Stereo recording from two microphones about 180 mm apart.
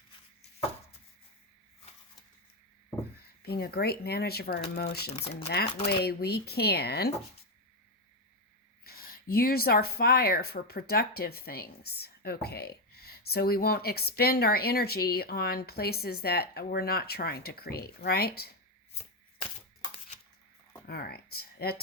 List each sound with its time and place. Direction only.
3.4 s speech: 60° left (ahead or behind)
5.1 s speech: 35° left (ahead or behind)
5.8 s speech: 60° left (ahead or behind)
8.8 s speech: 55° left (ahead or behind)
18.9 s shuffling cards: 35° left (ahead or behind)
20.8 s speech: 60° left (ahead or behind)